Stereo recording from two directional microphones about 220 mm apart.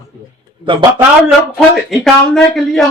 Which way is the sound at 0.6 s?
20° right (ahead or behind).